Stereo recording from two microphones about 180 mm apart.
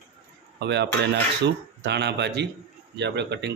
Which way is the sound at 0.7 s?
70° right (ahead or behind).